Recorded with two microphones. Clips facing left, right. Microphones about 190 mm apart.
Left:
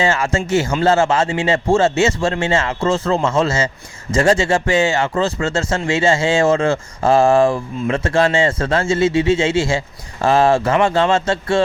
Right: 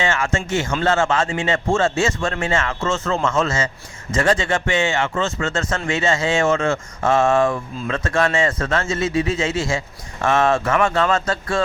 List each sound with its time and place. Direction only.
0.0 s speech: 35° left (ahead or behind)